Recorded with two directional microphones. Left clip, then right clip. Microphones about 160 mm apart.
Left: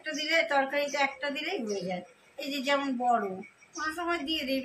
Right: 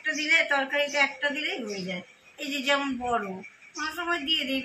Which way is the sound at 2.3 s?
30° left (ahead or behind).